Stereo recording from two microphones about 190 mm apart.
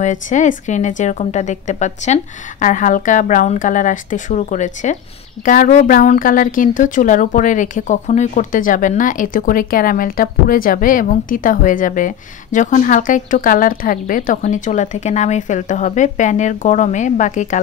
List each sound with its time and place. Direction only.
0.0 s speech: 40° left (ahead or behind)